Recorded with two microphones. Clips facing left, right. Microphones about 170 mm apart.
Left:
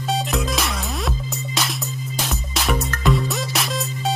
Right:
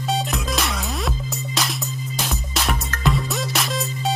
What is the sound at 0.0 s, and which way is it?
Music, centre (ahead or behind).